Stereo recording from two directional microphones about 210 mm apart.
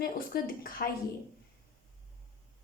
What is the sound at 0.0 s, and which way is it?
Speech, 45° left (ahead or behind).